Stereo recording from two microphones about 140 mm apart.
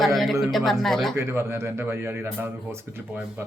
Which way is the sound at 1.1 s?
20° right (ahead or behind).